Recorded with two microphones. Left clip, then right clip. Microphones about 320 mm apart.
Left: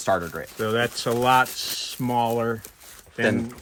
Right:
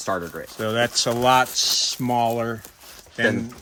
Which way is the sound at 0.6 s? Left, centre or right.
Centre.